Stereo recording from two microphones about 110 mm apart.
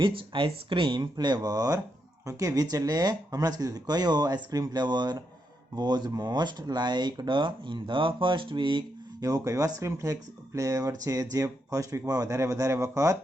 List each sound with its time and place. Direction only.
0.0 s speech: 55° right (ahead or behind)
9.2 s speech: 30° right (ahead or behind)